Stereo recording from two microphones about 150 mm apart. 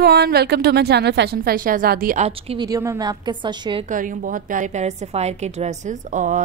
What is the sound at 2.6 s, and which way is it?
A woman's voice, 20° right (ahead or behind).